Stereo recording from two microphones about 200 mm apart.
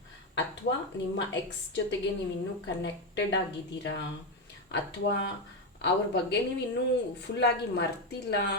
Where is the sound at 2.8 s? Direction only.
65° left (ahead or behind).